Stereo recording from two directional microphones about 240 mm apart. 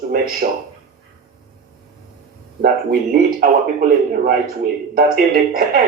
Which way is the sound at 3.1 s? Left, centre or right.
Right.